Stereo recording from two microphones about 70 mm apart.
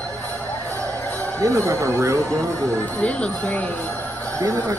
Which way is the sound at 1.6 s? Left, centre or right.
Right.